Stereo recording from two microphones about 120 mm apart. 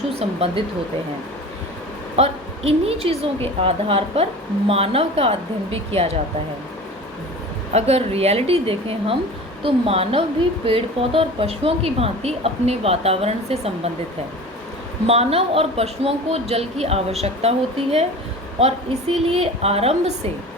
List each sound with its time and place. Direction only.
0.2 s speech: 60° right (ahead or behind)
2.1 s speech: 60° right (ahead or behind)
7.7 s a woman's voice: 60° right (ahead or behind)
15.0 s speech: 60° right (ahead or behind)
18.6 s speech: 60° right (ahead or behind)